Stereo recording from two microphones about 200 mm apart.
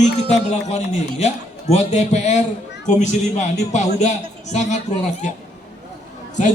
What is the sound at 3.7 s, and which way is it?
A man's voice, 35° left (ahead or behind).